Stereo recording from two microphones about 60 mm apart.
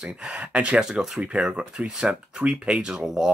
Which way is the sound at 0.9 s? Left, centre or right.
Centre.